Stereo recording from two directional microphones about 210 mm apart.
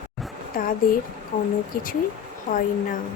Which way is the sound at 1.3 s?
35° left (ahead or behind).